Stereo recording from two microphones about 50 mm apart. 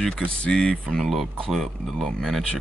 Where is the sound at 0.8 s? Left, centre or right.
Centre.